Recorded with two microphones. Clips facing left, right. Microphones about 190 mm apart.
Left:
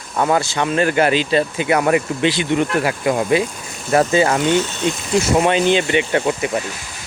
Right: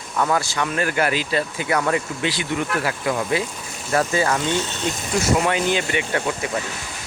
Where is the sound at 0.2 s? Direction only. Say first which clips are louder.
Left 4 dB; 25° left (ahead or behind).